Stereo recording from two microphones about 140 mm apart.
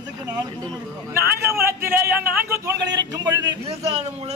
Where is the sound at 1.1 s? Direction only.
20° right (ahead or behind).